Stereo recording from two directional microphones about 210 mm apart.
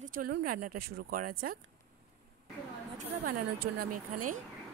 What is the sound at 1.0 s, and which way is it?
Speech, 45° right (ahead or behind).